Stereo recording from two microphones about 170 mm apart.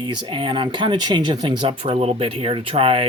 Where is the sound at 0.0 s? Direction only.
25° right (ahead or behind).